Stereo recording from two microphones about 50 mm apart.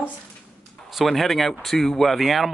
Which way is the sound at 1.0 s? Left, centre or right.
Centre.